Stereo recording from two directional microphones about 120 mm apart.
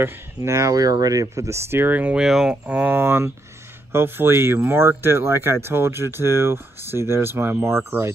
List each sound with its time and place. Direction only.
0.0 s speech: 25° right (ahead or behind)